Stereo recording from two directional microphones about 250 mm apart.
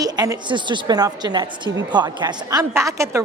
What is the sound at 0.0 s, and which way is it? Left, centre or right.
A woman's voice, centre.